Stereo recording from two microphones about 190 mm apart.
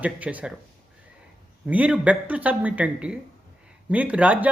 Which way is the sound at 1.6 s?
5° right (ahead or behind).